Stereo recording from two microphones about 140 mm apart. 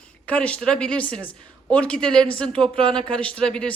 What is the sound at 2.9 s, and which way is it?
Speech, 5° left (ahead or behind).